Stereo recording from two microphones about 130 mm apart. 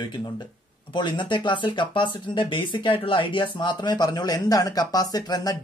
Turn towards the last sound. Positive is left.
turn(degrees=30)  # may be behind; listen again after turning